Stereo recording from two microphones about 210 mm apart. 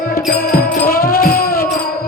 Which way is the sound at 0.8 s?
45° left (ahead or behind).